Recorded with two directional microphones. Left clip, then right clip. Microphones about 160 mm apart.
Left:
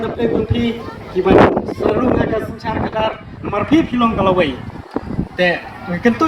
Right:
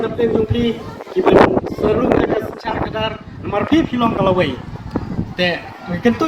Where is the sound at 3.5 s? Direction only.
80° left.